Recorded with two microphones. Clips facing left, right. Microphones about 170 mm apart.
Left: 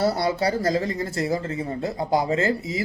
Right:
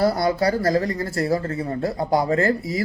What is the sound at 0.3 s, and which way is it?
Speech, 25° left (ahead or behind).